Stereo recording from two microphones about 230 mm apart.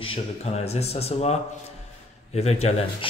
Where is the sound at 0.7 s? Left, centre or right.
Left.